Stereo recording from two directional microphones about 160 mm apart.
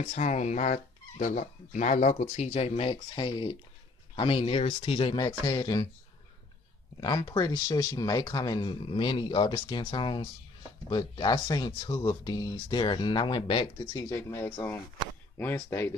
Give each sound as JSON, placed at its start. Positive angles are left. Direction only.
{"t": 0.0, "sound": "speech", "side_deg": 45}
{"t": 7.0, "sound": "speech", "side_deg": 25}
{"t": 14.0, "sound": "speech", "side_deg": 15}